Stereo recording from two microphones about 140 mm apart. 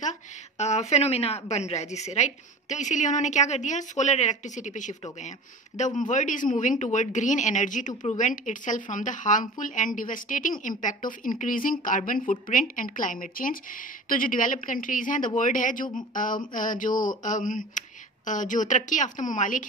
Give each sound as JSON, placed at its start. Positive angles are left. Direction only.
{"t": 0.6, "sound": "speech", "side_deg": 50}